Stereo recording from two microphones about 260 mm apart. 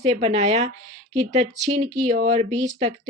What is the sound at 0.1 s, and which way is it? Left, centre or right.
Speech, right.